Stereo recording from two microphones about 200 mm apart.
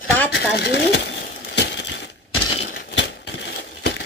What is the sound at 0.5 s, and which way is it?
Crumpling, 55° left (ahead or behind).